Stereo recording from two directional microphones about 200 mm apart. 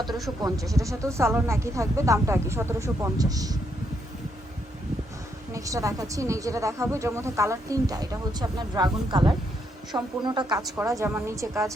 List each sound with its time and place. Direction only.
0.4 s a woman's voice: 15° right (ahead or behind)
5.5 s a woman's voice: 15° right (ahead or behind)